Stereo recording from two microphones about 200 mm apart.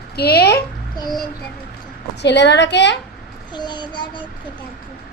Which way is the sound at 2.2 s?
60° left (ahead or behind).